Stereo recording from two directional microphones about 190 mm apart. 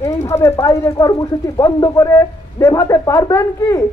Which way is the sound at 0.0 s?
15° left (ahead or behind).